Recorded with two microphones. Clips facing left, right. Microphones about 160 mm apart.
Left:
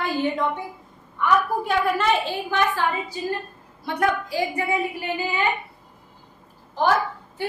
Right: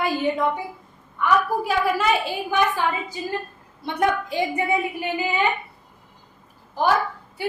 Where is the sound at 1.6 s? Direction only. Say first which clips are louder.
Even; 5° right (ahead or behind).